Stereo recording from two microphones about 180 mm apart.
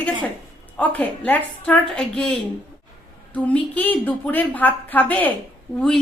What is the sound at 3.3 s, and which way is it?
A woman's voice, 10° left (ahead or behind).